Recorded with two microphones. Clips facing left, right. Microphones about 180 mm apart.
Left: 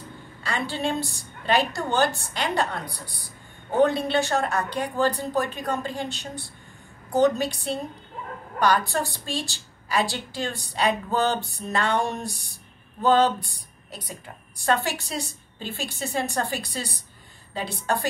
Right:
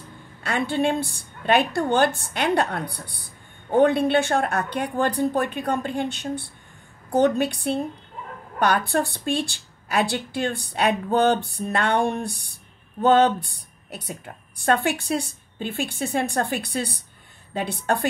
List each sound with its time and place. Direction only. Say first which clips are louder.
0.4 s a woman's voice: right 5 dB; 55° right (ahead or behind)
14.6 s a woman's voice: right 3 dB; 55° right (ahead or behind)